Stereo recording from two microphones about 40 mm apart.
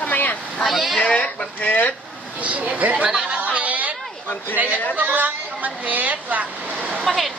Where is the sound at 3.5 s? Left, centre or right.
Right.